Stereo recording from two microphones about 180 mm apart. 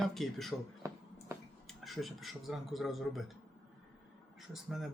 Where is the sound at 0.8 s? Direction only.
15° right (ahead or behind).